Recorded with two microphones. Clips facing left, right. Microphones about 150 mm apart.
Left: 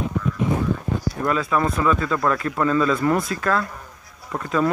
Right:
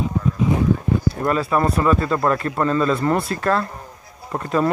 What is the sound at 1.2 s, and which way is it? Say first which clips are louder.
Speech: even; 40° right (ahead or behind).